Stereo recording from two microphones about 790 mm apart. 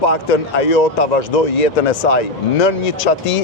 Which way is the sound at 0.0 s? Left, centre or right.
Left.